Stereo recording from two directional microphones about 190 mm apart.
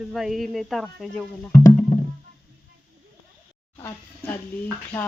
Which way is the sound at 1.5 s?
40° left (ahead or behind).